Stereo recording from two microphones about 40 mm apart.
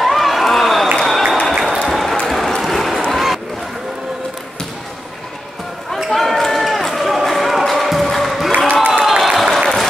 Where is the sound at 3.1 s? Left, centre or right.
Centre.